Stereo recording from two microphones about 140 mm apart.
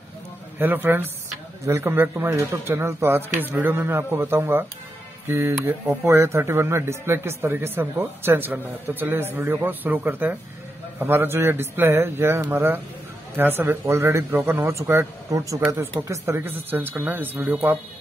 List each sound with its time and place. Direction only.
0.6 s a man's voice: 15° right (ahead or behind)